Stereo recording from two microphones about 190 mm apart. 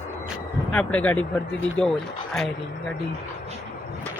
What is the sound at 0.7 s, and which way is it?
Speech, 5° left (ahead or behind).